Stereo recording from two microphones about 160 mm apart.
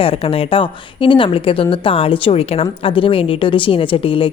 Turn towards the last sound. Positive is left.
turn(degrees=35)  # may be behind; listen again after turning